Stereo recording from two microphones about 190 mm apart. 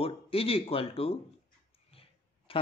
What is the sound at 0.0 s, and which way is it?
Speech, 30° left (ahead or behind).